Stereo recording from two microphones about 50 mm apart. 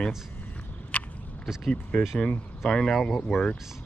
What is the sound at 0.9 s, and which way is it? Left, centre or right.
Biting, left.